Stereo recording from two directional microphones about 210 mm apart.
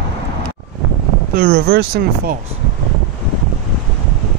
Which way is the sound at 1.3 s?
45° right (ahead or behind).